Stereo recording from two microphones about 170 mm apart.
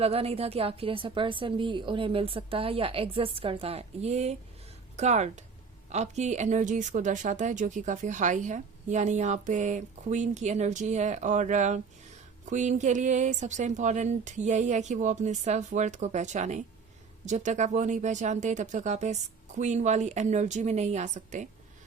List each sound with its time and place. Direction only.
0.0 s a woman's voice: 35° right (ahead or behind)